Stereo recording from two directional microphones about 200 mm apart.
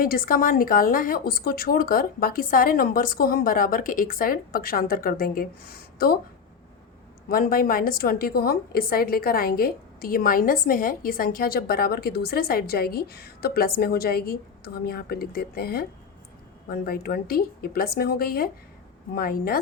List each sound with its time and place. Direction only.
0.0 s a woman's voice: 45° left (ahead or behind)
7.3 s a woman's voice: 45° left (ahead or behind)